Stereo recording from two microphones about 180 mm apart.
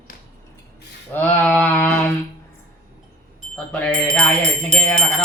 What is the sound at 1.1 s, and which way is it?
Speech, 10° left (ahead or behind).